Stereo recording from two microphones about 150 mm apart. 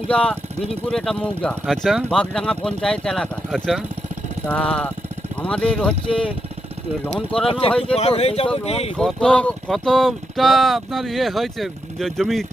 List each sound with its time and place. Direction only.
0.1 s speech: 10° left (ahead or behind)
7.9 s speech: 40° left (ahead or behind)
9.0 s speech: 5° left (ahead or behind)